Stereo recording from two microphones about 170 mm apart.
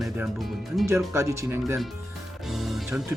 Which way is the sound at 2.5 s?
Centre (ahead or behind).